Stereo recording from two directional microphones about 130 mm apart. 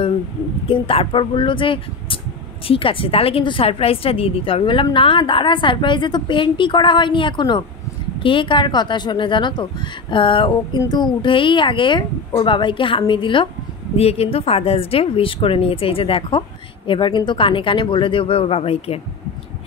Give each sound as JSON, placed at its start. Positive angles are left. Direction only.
{"t": 0.7, "sound": "a woman's voice", "side_deg": 45}
{"t": 13.9, "sound": "a woman's voice", "side_deg": 50}